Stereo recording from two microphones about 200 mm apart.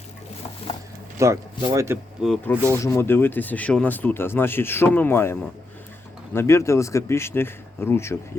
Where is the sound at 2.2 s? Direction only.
5° right (ahead or behind).